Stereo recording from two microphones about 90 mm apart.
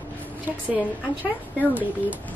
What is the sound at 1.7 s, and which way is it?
Speech, 20° right (ahead or behind).